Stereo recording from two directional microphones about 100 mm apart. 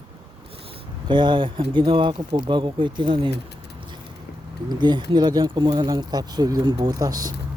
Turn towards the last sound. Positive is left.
turn(degrees=-40)  # may be behind; listen again after turning